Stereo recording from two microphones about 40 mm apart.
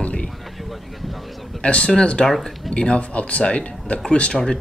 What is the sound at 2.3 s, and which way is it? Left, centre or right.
Speech, centre.